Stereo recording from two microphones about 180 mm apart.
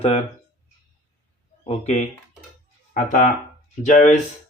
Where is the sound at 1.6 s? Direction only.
40° left (ahead or behind).